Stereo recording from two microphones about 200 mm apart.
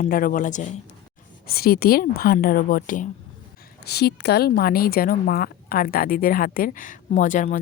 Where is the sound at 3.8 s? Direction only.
55° left (ahead or behind).